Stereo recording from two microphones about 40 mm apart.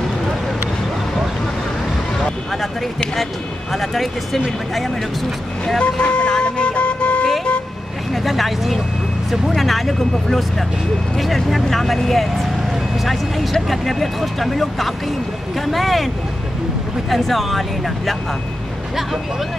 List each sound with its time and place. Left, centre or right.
2.1 s vehicle: centre
3.7 s speech: centre
5.8 s music: left
8.1 s speech: centre
17.1 s speech: centre